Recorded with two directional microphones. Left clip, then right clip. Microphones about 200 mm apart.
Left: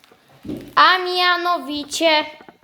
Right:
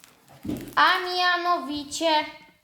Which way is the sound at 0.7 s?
50° left (ahead or behind).